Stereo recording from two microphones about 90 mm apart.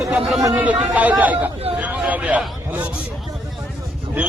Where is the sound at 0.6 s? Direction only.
15° right (ahead or behind).